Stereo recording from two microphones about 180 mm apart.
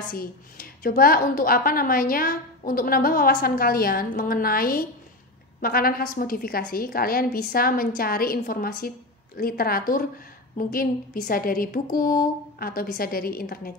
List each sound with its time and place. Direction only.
0.1 s a woman's voice: 55° left (ahead or behind)